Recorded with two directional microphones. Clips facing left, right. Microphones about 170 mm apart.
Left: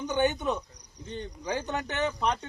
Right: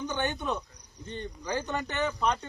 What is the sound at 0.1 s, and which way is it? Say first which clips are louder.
Speech: left 8 dB; 10° left (ahead or behind).